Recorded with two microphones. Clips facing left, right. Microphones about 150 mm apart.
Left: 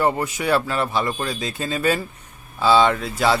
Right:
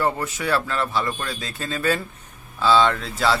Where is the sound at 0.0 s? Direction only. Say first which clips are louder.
Left 3 dB; 15° left (ahead or behind).